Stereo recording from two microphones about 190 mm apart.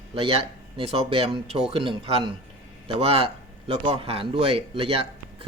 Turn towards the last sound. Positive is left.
turn(degrees=-30)  # may be behind; listen again after turning